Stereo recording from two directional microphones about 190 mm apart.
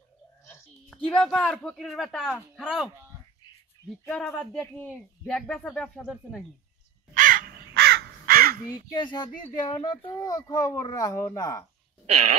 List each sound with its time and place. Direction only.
0.8 s speech: 5° left (ahead or behind)
4.0 s speech: 5° right (ahead or behind)
7.2 s crow: 45° right (ahead or behind)
8.9 s a child's voice: 25° left (ahead or behind)